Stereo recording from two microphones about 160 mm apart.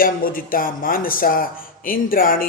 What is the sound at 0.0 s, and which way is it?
Speech, 60° left (ahead or behind).